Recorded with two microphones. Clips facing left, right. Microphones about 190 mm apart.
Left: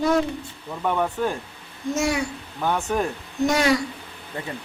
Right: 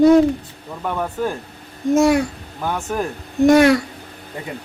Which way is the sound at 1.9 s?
55° right (ahead or behind).